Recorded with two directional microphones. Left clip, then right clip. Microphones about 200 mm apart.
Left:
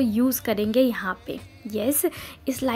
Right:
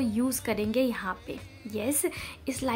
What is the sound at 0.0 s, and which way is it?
Speech, 20° left (ahead or behind).